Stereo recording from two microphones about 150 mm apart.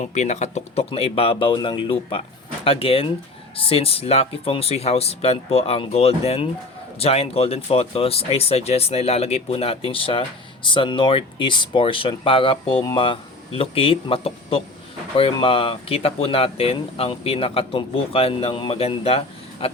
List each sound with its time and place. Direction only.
0.0 s speech: 50° left (ahead or behind)